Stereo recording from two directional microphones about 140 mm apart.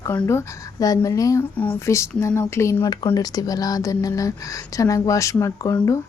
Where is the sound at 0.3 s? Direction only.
25° left (ahead or behind).